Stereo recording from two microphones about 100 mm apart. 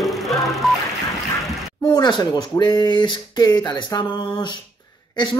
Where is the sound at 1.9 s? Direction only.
45° left (ahead or behind).